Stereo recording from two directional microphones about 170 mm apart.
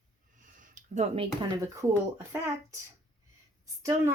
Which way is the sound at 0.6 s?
45° right (ahead or behind).